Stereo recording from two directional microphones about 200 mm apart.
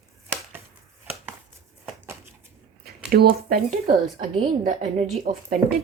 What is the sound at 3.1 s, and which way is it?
Speech, 50° right (ahead or behind).